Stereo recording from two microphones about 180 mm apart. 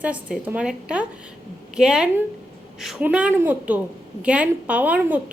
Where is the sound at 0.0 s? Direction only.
5° right (ahead or behind).